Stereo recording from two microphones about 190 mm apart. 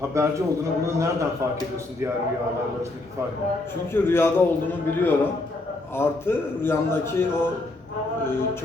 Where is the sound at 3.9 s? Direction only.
10° left (ahead or behind).